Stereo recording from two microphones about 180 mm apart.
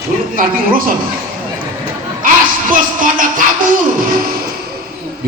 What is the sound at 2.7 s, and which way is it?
Speech, 50° right (ahead or behind).